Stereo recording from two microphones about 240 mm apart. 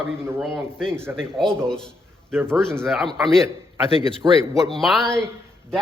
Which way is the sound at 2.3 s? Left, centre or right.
Centre.